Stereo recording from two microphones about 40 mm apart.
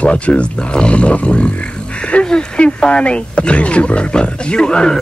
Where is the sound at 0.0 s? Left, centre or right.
Left.